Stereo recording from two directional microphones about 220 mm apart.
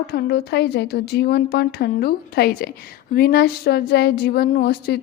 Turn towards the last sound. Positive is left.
turn(degrees=45)  # may be behind; listen again after turning